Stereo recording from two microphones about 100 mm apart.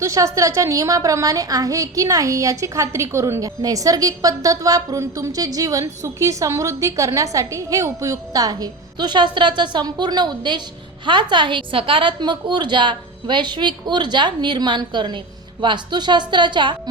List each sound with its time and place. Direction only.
0.0 s a woman's voice: 30° right (ahead or behind); by 16.9 s 50° right (ahead or behind)